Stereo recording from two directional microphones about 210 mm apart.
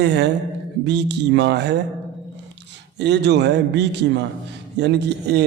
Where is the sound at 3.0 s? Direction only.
55° right (ahead or behind).